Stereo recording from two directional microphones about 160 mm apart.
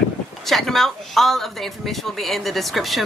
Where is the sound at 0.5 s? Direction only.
Centre (ahead or behind).